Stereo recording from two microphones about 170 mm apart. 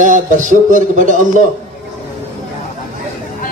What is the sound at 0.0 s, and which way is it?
A man's voice, 50° right (ahead or behind).